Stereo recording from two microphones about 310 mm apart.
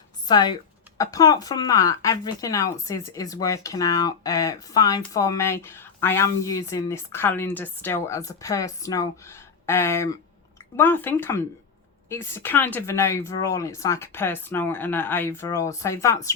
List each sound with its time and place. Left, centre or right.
0.3 s speech: centre